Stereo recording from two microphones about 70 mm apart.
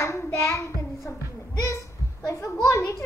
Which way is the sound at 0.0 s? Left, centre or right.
Left.